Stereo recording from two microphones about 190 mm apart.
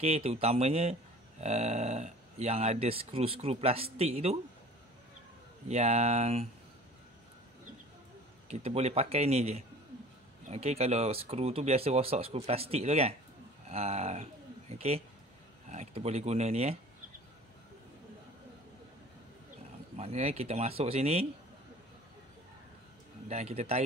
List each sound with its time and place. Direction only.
0.0 s speech: 35° right (ahead or behind)
5.7 s speech: 35° right (ahead or behind)
8.5 s speech: 35° right (ahead or behind)
20.0 s speech: 35° right (ahead or behind)
23.2 s speech: 35° right (ahead or behind)